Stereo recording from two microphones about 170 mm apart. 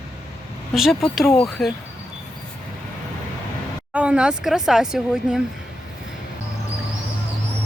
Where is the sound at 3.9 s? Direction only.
5° right (ahead or behind).